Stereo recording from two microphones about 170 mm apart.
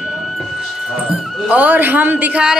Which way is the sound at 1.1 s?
5° right (ahead or behind).